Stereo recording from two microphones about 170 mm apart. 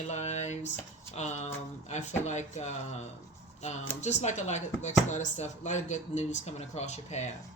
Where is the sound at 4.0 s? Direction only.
45° left (ahead or behind).